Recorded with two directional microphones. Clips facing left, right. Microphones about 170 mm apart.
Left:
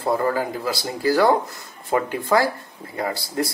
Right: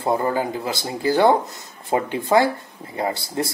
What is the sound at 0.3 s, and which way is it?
Speech, 20° right (ahead or behind).